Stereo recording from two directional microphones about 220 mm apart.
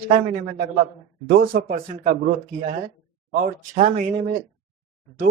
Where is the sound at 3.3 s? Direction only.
35° right (ahead or behind).